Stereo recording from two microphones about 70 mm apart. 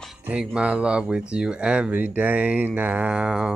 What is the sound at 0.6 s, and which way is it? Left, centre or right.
Speech, centre.